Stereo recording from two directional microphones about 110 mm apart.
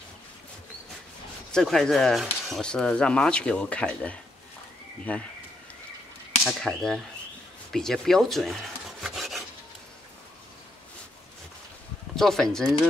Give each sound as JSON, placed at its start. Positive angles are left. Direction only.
{"t": 1.5, "sound": "speech", "side_deg": 5}
{"t": 6.4, "sound": "speech", "side_deg": 5}
{"t": 9.0, "sound": "filing", "side_deg": 0}
{"t": 12.2, "sound": "speech", "side_deg": 5}